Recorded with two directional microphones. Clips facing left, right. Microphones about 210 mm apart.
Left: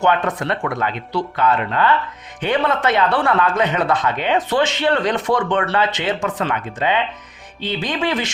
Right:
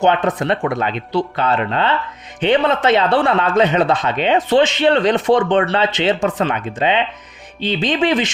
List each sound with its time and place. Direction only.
0.0 s speech: 20° right (ahead or behind)